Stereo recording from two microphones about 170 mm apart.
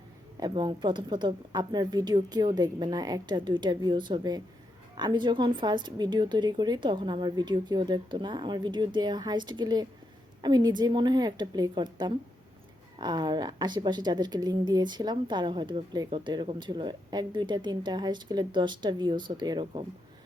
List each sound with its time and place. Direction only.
0.3 s a woman's voice: 25° right (ahead or behind)